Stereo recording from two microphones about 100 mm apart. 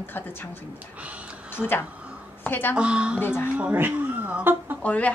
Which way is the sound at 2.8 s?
10° right (ahead or behind).